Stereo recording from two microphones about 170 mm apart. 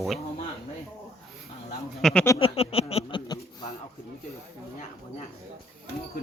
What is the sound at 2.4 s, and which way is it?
Speech, 35° left (ahead or behind).